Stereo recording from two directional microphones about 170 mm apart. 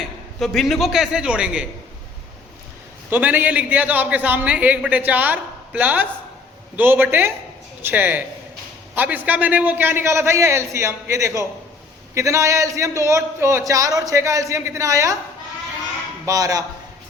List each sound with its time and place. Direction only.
0.3 s a man's voice: centre (ahead or behind)
3.1 s a man's voice: 10° right (ahead or behind)
16.2 s speech: 20° right (ahead or behind)